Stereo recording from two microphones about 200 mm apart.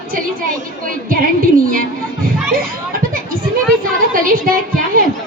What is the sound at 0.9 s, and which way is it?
Music, 45° right (ahead or behind).